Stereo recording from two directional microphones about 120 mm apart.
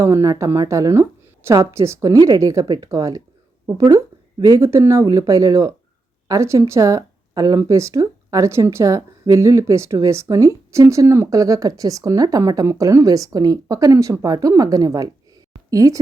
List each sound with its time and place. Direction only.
0.0 s speech: 25° right (ahead or behind)